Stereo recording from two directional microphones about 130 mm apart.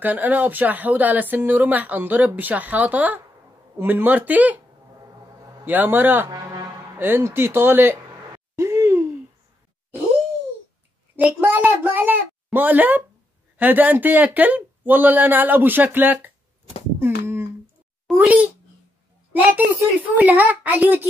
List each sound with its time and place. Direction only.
0.0 s speech: 15° right (ahead or behind)
5.7 s speech: 15° right (ahead or behind)
8.5 s a sound: 20° right (ahead or behind)
11.1 s speech: 15° right (ahead or behind)
17.0 s a sound: 20° right (ahead or behind)
18.1 s speech: 10° right (ahead or behind)